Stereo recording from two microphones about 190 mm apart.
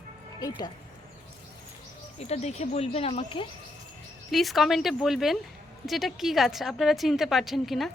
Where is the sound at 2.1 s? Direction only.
35° left (ahead or behind).